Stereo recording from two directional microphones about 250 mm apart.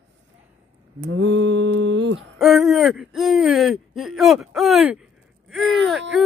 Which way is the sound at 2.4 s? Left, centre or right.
Centre.